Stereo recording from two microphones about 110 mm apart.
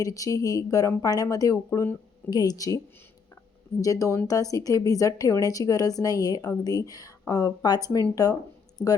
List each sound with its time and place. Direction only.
0.0 s a woman's voice: 30° left (ahead or behind)